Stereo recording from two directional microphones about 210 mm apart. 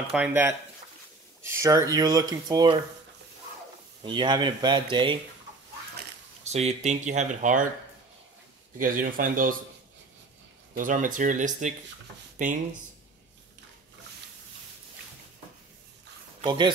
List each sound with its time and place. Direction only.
0.1 s speech: 10° right (ahead or behind)
4.0 s speech: 20° right (ahead or behind)
6.4 s speech: 30° right (ahead or behind)
8.7 s speech: 40° right (ahead or behind)
10.7 s speech: 40° right (ahead or behind)
16.3 s speech: 20° right (ahead or behind)